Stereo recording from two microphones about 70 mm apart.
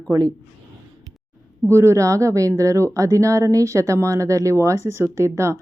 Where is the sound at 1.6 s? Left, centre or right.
Right.